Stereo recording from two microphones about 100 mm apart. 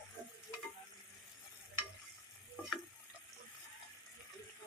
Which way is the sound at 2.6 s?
15° left (ahead or behind).